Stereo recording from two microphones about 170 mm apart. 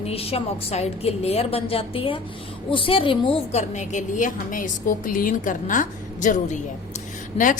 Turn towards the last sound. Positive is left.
turn(degrees=35)  # may be behind; listen again after turning